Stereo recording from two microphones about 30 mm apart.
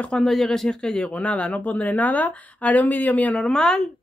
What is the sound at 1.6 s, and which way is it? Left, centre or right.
Speech, left.